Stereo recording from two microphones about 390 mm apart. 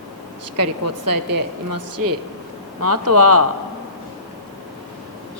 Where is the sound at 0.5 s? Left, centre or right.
Right.